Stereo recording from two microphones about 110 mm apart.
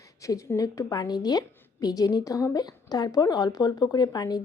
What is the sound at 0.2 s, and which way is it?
A woman's voice, 30° left (ahead or behind).